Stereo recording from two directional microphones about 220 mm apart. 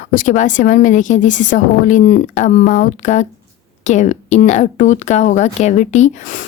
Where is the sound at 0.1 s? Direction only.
35° left (ahead or behind).